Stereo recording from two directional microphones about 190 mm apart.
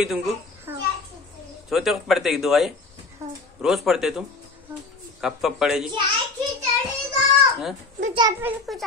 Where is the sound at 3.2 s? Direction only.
15° right (ahead or behind).